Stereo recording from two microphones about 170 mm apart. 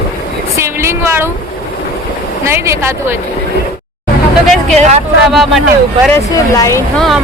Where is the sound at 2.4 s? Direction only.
15° right (ahead or behind).